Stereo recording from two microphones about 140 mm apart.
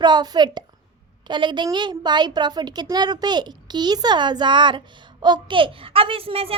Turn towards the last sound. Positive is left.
turn(degrees=-45)  # may be behind; listen again after turning